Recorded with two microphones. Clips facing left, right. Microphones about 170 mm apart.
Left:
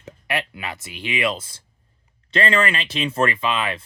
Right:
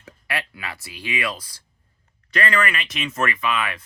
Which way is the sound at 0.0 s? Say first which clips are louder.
Left 4 dB; 20° left (ahead or behind).